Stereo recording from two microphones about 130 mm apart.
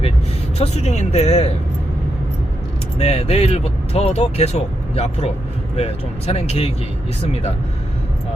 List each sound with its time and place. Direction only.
0.6 s speech: 60° left (ahead or behind)
3.0 s speech: 55° left (ahead or behind)